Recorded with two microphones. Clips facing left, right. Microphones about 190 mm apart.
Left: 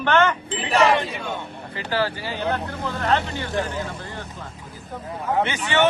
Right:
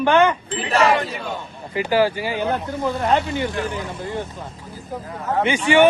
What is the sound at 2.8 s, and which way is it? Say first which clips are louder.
A man's voice: right 3 dB; 15° right (ahead or behind).